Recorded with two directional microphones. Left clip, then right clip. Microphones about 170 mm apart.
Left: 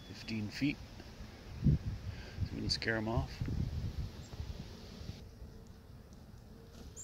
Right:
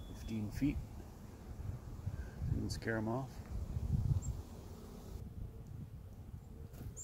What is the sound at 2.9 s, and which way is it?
Speech, 15° left (ahead or behind).